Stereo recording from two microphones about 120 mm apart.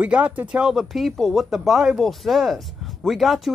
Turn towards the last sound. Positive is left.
turn(degrees=0)  # may be behind; listen again after turning